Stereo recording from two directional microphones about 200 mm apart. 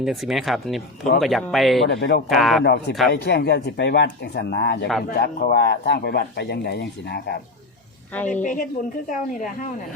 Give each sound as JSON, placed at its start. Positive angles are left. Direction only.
{"t": 0.0, "sound": "speech", "side_deg": 0}
{"t": 1.9, "sound": "speech", "side_deg": 55}
{"t": 2.3, "sound": "speech", "side_deg": 0}
{"t": 2.6, "sound": "speech", "side_deg": 55}
{"t": 8.3, "sound": "speech", "side_deg": 40}